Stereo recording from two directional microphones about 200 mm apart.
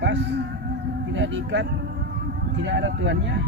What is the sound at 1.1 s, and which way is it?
Speech, 70° right (ahead or behind).